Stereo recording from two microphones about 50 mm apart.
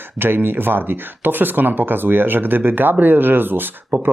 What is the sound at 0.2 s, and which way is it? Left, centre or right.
Speech, right.